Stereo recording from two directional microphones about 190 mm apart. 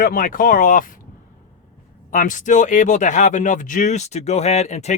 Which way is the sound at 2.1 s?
40° left (ahead or behind).